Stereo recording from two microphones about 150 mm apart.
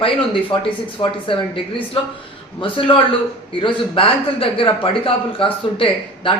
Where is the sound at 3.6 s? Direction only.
35° left (ahead or behind).